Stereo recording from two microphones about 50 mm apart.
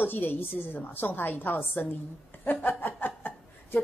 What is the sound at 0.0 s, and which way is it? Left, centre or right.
A woman's voice, left.